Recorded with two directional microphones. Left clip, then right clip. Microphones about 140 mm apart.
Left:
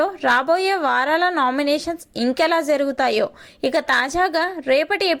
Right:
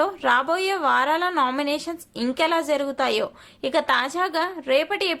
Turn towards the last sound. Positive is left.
turn(degrees=30)  # may be behind; listen again after turning